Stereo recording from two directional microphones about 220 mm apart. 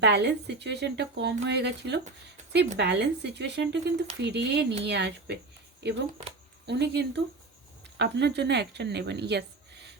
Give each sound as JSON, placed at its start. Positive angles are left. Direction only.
{"t": 0.0, "sound": "speech", "side_deg": -50}